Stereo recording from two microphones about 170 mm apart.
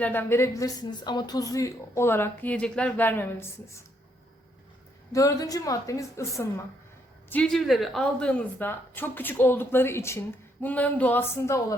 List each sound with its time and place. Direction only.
0.0 s a woman's voice: 10° left (ahead or behind)
5.1 s a woman's voice: 20° left (ahead or behind)
7.3 s speech: 5° left (ahead or behind)
8.5 s a woman's voice: 10° left (ahead or behind)